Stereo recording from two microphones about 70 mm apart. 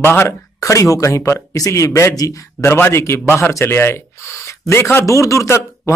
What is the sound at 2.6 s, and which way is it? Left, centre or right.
Speech, left.